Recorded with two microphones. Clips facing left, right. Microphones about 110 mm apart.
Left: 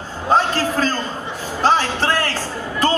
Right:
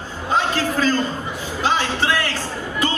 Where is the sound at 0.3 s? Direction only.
40° left (ahead or behind).